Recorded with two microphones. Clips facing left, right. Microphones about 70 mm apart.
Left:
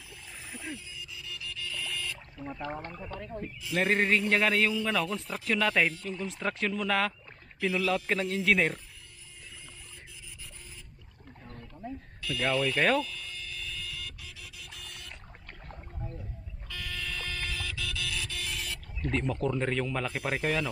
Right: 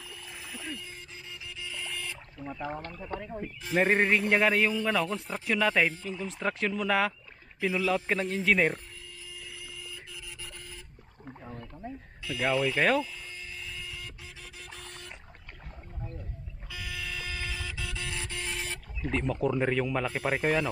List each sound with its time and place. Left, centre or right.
0.4 s wild animals: centre
0.8 s music: right
1.1 s music: right
2.4 s a man's voice: centre
7.6 s a man's voice: centre
9.3 s printer: right
11.4 s a sound: centre
12.2 s speech: centre
13.0 s a sound: right
14.4 s printer: right
16.6 s buzzer: centre; by 18.8 s right
19.0 s speech: centre